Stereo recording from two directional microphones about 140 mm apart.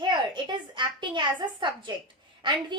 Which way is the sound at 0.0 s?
35° right (ahead or behind).